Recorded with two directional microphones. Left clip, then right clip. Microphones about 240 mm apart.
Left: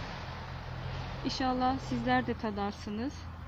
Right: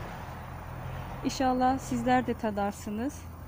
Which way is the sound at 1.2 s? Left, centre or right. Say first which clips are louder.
Right 4 dB; right.